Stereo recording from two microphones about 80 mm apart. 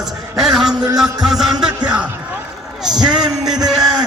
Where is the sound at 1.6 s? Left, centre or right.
Centre.